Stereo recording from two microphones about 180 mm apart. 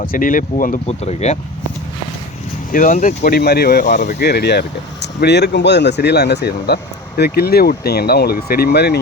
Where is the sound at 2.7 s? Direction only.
50° left (ahead or behind).